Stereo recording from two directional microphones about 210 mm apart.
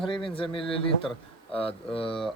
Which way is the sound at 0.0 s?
25° left (ahead or behind).